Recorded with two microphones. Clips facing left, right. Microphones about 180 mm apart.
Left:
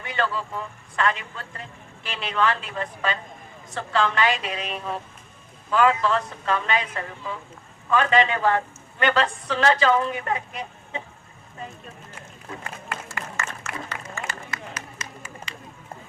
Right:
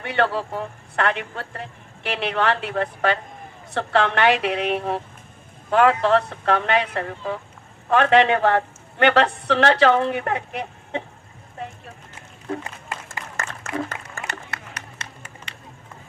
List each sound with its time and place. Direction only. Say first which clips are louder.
0.0 s a man's voice: right 5 dB; 65° right (ahead or behind)
13.3 s applause: right 8 dB; 50° right (ahead or behind)
14.3 s run: even; 65° right (ahead or behind)